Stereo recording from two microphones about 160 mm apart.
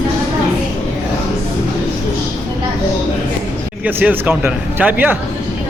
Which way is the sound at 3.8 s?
10° right (ahead or behind).